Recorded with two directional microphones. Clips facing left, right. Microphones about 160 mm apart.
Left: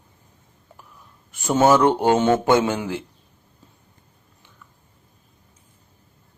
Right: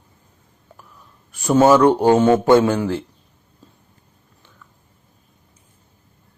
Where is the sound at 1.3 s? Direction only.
20° left (ahead or behind).